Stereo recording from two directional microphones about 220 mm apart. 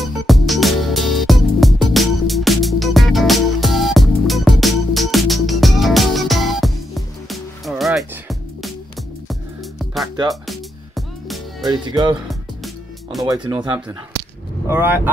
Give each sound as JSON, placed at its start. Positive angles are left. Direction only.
{"t": 0.0, "sound": "music", "side_deg": 0}
{"t": 11.6, "sound": "speech", "side_deg": -20}
{"t": 12.3, "sound": "music", "side_deg": 0}
{"t": 13.2, "sound": "speech", "side_deg": -15}